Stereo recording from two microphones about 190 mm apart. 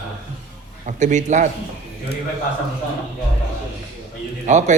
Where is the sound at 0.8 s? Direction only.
40° right (ahead or behind).